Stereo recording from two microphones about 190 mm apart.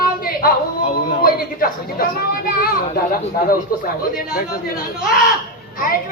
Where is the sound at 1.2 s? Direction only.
50° left (ahead or behind).